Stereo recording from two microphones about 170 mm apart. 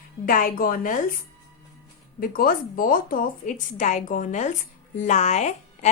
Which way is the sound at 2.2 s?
55° left (ahead or behind).